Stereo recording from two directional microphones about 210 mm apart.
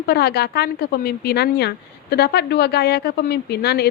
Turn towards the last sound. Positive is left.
turn(degrees=50)  # may be behind; listen again after turning